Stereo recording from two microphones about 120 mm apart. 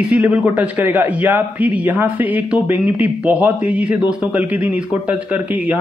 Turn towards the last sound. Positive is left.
turn(degrees=-10)  # may be behind; listen again after turning